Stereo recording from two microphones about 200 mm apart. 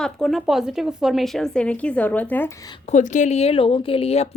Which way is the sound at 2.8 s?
35° left (ahead or behind).